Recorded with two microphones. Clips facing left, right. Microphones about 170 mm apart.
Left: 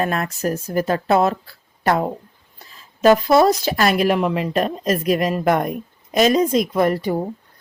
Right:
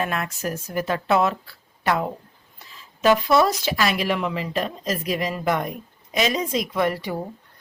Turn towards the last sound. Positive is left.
turn(degrees=40)  # may be behind; listen again after turning